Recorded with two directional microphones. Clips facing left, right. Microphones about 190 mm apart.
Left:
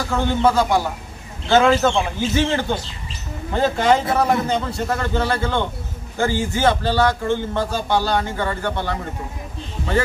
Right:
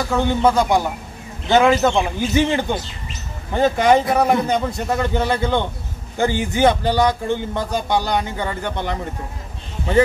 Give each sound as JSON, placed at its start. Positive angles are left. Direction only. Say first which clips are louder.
{"t": 0.2, "sound": "a man's voice", "louder": "even", "side_deg": -15}